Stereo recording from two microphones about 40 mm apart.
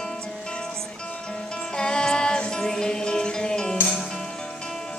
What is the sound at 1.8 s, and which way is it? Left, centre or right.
Music, centre.